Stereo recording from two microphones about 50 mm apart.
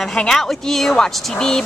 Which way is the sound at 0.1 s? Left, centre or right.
Centre.